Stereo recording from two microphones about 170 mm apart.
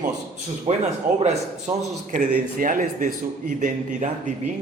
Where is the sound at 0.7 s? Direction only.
35° right (ahead or behind).